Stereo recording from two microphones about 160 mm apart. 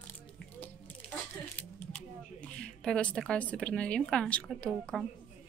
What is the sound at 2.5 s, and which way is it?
A woman's voice, 5° left (ahead or behind).